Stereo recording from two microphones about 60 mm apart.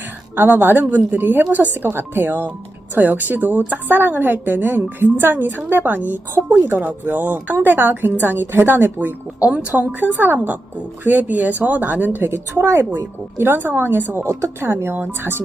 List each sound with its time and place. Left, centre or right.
0.3 s a woman's voice: right